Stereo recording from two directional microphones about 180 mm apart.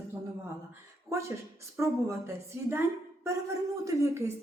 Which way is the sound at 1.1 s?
15° right (ahead or behind).